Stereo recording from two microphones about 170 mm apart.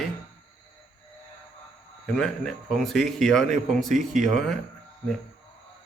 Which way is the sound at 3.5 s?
50° right (ahead or behind).